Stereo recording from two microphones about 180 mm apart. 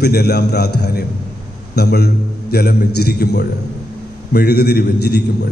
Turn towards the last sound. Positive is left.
turn(degrees=65)  # may be behind; listen again after turning